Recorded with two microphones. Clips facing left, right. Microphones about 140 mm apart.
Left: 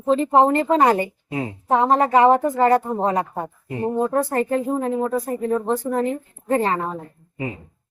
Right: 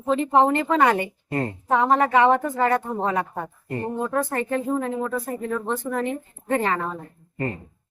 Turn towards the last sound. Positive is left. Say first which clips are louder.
# right 1 dB
turn(degrees=5)  # may be behind; listen again after turning